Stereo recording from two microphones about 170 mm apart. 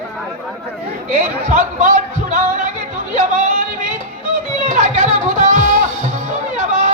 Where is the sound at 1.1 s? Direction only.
40° right (ahead or behind).